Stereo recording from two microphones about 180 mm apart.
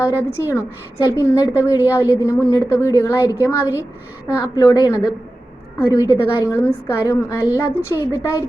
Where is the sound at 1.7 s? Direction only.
20° left (ahead or behind).